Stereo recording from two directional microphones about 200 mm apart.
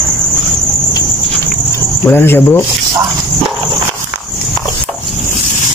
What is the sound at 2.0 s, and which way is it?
Speech, 10° left (ahead or behind).